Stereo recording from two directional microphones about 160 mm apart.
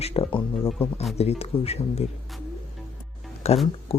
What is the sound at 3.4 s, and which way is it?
Speech, 40° left (ahead or behind).